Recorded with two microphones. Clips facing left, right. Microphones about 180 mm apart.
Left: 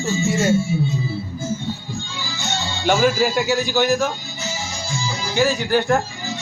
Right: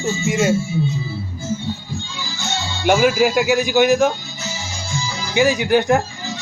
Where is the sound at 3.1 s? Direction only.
15° right (ahead or behind).